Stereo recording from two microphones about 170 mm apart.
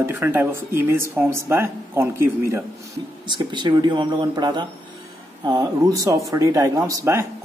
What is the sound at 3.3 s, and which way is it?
Speech, 25° right (ahead or behind).